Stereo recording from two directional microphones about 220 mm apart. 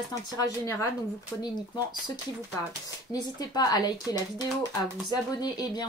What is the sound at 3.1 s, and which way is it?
Speech, 15° left (ahead or behind).